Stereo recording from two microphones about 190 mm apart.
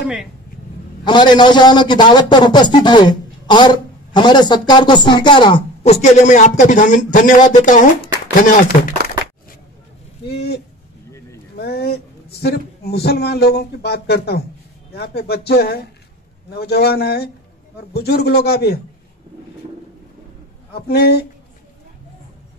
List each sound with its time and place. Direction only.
0.0 s speech: 5° right (ahead or behind)
1.0 s a man's voice: 25° left (ahead or behind); by 8.7 s 45° left (ahead or behind)
10.2 s speech: 60° left (ahead or behind)
20.7 s speech: 55° left (ahead or behind)